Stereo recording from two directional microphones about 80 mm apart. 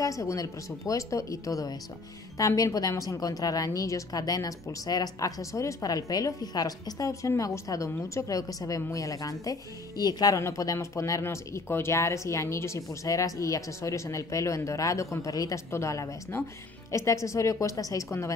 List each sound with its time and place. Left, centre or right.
0.0 s a woman's voice: left